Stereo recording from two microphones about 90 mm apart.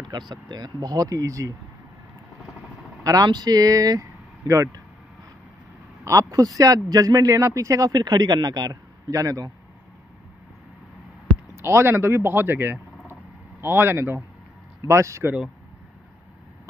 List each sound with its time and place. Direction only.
0.1 s speech: 50° right (ahead or behind)
3.0 s speech: 45° right (ahead or behind)
6.0 s speech: 40° right (ahead or behind)
11.6 s a man's voice: 25° right (ahead or behind)